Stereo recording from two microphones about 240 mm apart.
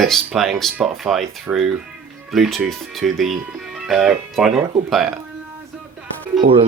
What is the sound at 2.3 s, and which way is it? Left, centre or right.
Speech, centre.